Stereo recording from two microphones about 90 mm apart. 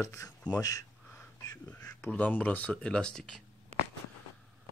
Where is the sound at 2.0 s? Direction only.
20° left (ahead or behind).